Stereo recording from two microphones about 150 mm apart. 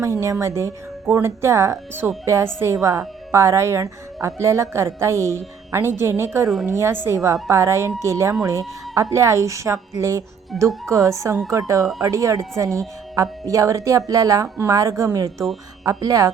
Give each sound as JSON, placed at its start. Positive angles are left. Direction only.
{"t": 0.0, "sound": "a woman's voice", "side_deg": -20}